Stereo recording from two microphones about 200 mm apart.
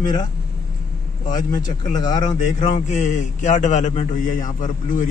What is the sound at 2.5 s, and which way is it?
A man's voice, 35° left (ahead or behind).